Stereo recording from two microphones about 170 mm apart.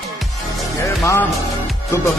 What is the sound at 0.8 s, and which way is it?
Speech, 15° left (ahead or behind).